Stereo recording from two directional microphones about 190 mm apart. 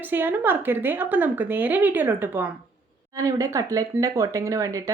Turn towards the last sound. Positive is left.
turn(degrees=-15)  # may be behind; listen again after turning